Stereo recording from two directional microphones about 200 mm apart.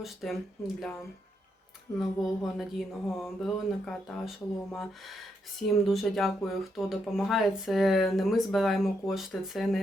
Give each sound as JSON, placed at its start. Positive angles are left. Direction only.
{"t": 0.0, "sound": "speech", "side_deg": 0}
{"t": 2.0, "sound": "speech", "side_deg": 0}